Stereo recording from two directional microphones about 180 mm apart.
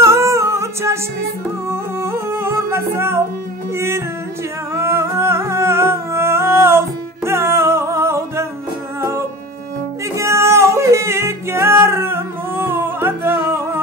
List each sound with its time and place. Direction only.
0.0 s music: 15° right (ahead or behind)
10.1 s music: 15° right (ahead or behind)